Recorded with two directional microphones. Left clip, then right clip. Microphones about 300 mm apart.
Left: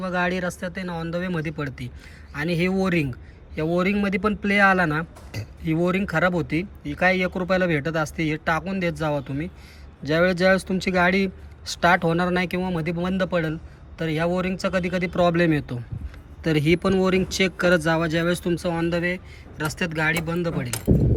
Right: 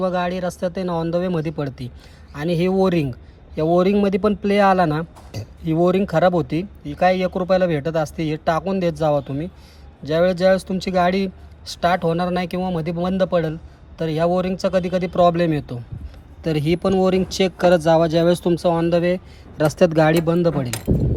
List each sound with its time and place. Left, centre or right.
0.0 s speech: centre